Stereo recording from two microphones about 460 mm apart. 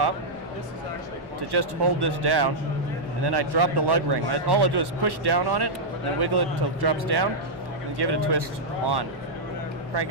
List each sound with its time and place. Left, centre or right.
1.5 s a man's voice: right